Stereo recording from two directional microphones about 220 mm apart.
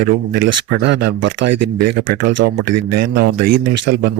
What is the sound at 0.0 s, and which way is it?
Speech, 50° right (ahead or behind).